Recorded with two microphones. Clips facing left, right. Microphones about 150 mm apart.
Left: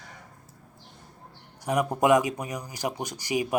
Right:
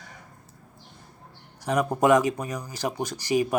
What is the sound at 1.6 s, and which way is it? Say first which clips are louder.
Speech: right 1 dB; 20° left (ahead or behind).